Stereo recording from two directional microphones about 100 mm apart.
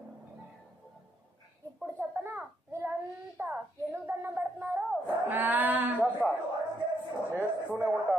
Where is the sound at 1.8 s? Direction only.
25° right (ahead or behind).